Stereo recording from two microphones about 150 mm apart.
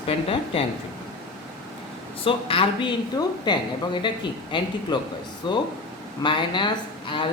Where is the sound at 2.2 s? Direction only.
35° left (ahead or behind).